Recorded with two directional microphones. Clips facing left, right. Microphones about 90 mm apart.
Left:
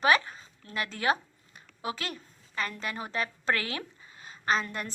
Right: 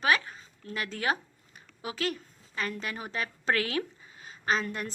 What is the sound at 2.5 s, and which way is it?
A woman's voice, 5° right (ahead or behind).